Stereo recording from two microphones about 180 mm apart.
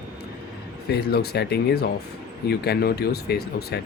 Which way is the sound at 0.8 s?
65° left (ahead or behind).